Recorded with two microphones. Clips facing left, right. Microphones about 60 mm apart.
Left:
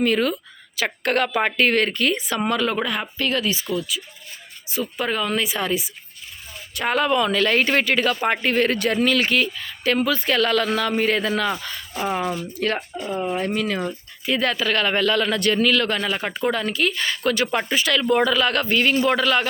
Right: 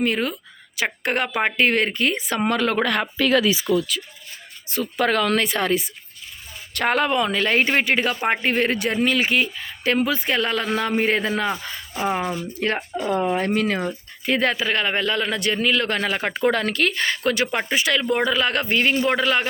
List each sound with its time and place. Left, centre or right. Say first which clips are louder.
0.0 s speech: left 3 dB; right
2.8 s speech: right 3 dB; right
5.4 s speech: right 2 dB; right
12.2 s speech: left 1 dB; centre
12.5 s speech: even; right
13.0 s speech: right 4 dB; right
13.3 s speech: right 2 dB; right
14.5 s speech: left 1 dB; right
15.9 s speech: right 1 dB; right